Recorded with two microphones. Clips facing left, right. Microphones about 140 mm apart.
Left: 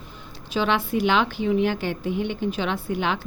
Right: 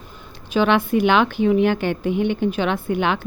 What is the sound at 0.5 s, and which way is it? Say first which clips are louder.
A woman's voice: right 5 dB; 55° right (ahead or behind).